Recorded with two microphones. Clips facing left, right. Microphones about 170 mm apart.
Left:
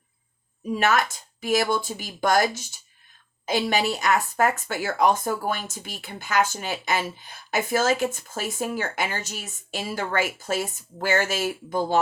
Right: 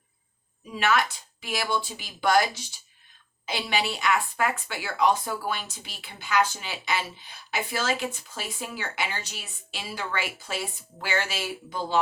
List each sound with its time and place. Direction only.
0.7 s speech: 45° left (ahead or behind)